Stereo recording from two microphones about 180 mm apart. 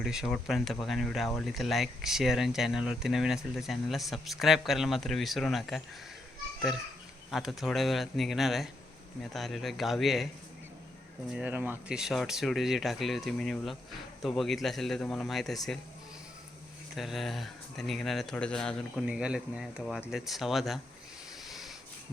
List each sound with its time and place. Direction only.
0.0 s speech: centre (ahead or behind)
7.3 s speech: centre (ahead or behind)
11.3 s speech: 5° right (ahead or behind)
16.9 s speech: centre (ahead or behind)
21.4 s a sound: centre (ahead or behind)